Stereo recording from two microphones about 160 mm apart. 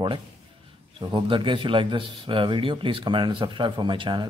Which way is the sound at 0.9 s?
30° right (ahead or behind).